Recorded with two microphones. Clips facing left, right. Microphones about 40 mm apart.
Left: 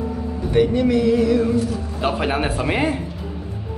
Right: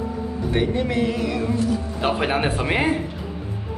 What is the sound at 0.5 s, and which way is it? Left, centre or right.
Speech, right.